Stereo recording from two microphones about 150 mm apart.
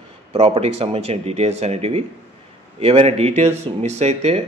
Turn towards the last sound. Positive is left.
turn(degrees=-45)  # may be behind; listen again after turning